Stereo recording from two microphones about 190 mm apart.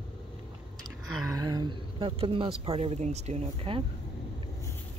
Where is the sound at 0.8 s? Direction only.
20° right (ahead or behind).